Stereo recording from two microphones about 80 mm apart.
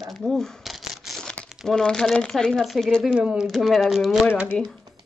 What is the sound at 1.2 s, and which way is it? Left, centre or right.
Crumpling, centre.